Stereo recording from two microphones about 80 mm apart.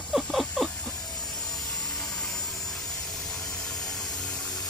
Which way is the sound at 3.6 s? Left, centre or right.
Centre.